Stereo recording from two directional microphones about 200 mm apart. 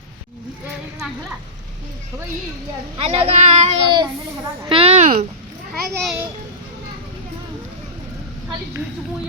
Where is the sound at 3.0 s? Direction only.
30° right (ahead or behind).